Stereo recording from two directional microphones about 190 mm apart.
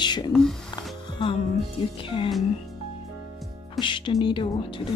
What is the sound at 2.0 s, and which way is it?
Speech, 25° left (ahead or behind).